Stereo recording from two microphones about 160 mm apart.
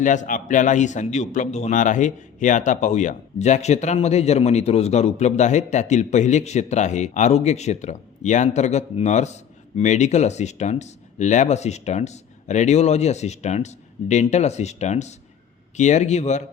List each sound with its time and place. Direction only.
0.0 s a man's voice: 50° left (ahead or behind)